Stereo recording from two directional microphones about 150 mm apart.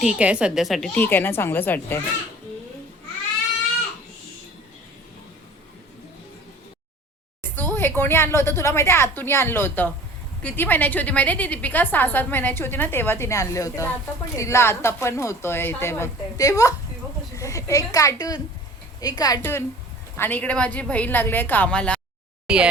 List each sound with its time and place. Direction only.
0.0 s a woman's voice: 5° right (ahead or behind)
0.9 s a woman's voice: 15° left (ahead or behind)
7.5 s a woman's voice: 15° left (ahead or behind)
22.5 s a woman's voice: 5° right (ahead or behind)